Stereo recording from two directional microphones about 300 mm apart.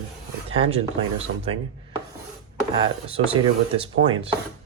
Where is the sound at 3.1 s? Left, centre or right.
Centre.